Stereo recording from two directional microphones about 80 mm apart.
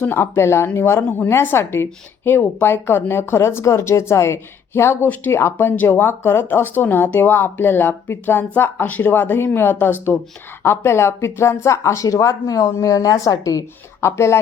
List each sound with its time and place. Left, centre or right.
0.0 s a woman's voice: left
14.0 s a woman's voice: left